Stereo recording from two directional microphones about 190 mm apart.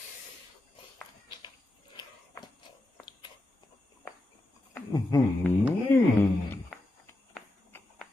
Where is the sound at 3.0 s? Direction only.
25° left (ahead or behind).